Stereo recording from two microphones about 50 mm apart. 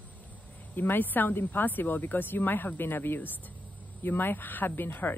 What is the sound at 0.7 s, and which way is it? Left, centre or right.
Speech, left.